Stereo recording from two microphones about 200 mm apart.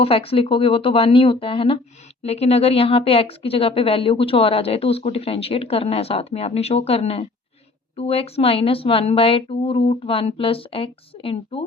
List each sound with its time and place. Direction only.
0.0 s speech: 30° left (ahead or behind)